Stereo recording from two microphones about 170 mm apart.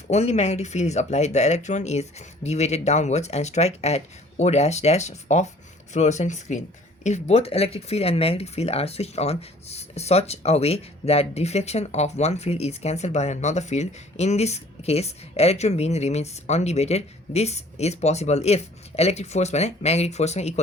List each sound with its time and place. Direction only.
0.1 s speech: 40° left (ahead or behind)